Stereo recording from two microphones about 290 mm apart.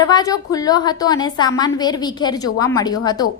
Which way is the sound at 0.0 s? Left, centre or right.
Centre.